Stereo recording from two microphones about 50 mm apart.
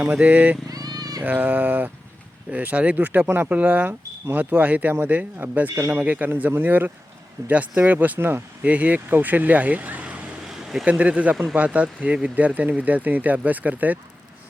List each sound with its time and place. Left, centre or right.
0.1 s speech: right